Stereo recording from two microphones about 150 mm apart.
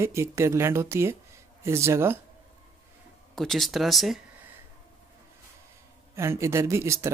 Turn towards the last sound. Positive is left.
turn(degrees=-20)  # may be behind; listen again after turning